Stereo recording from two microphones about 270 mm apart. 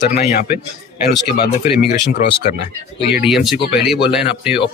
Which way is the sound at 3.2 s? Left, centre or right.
Centre.